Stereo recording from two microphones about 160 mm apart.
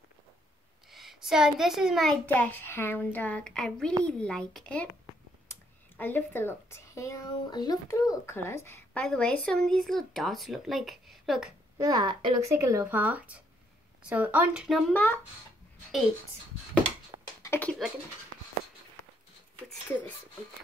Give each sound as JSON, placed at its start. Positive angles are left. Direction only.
{"t": 0.9, "sound": "a child's voice", "side_deg": 0}
{"t": 11.8, "sound": "speech", "side_deg": -25}
{"t": 17.4, "sound": "a sound", "side_deg": 15}